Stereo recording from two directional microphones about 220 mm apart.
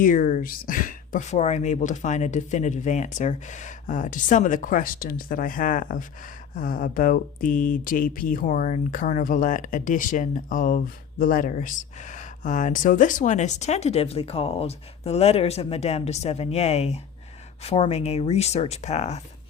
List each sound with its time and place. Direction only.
0.0 s speech: 35° left (ahead or behind)